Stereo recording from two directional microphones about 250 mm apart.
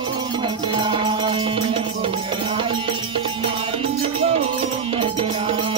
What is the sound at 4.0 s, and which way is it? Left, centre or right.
Music, right.